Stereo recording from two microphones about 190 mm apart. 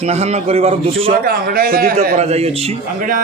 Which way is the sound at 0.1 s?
35° right (ahead or behind).